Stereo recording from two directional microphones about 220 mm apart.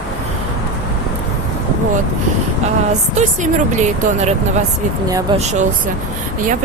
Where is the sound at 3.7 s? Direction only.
35° right (ahead or behind).